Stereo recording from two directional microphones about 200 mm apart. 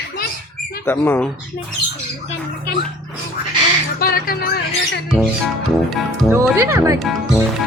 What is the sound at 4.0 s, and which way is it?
Speech, 50° left (ahead or behind).